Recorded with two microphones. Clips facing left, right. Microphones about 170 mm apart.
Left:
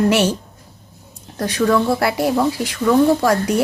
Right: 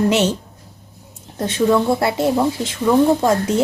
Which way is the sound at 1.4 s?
25° right (ahead or behind).